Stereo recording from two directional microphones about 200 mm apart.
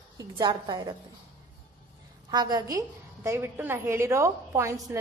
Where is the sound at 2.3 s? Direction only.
20° right (ahead or behind).